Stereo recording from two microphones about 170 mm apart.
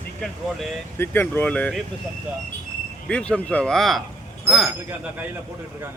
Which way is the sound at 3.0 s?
5° left (ahead or behind).